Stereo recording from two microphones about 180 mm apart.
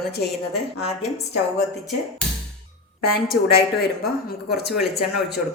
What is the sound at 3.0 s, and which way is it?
Speech, 55° left (ahead or behind).